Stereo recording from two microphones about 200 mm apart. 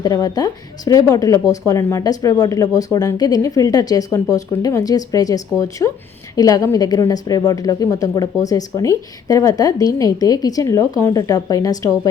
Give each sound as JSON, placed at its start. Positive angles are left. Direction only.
{"t": 0.0, "sound": "speech", "side_deg": 20}